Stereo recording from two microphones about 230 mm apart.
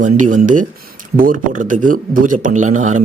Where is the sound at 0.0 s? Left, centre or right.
Right.